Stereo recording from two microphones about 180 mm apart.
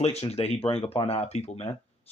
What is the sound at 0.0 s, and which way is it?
Speech, 35° left (ahead or behind).